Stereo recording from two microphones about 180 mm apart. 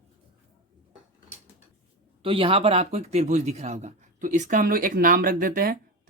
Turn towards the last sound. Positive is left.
turn(degrees=-50)  # may be behind; listen again after turning